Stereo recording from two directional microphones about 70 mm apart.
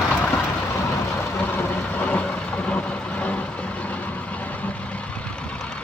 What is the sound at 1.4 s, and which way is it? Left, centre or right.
Vehicle, left.